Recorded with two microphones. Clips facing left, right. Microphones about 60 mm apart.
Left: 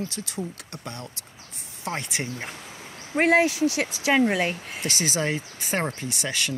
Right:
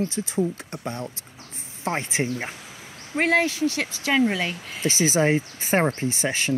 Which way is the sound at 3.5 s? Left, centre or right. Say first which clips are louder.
Left 1 dB; right.